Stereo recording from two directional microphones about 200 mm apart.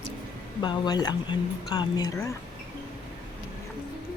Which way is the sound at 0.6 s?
20° left (ahead or behind).